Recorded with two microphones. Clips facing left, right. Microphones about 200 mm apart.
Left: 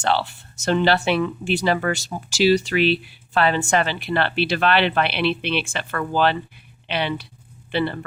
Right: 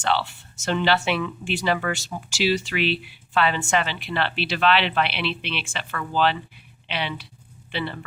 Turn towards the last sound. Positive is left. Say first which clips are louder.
# left 7 dB
turn(degrees=45)  # may be behind; listen again after turning